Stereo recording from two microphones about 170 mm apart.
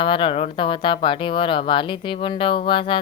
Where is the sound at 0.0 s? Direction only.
30° left (ahead or behind).